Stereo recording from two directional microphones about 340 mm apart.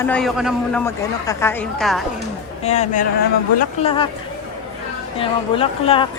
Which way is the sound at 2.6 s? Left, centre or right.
Centre.